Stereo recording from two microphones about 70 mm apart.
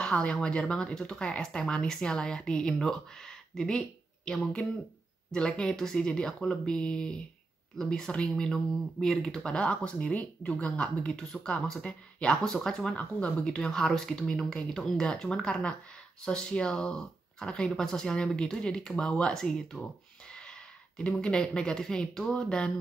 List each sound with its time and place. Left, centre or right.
0.0 s speech: centre
12.9 s speech: centre
21.0 s speech: centre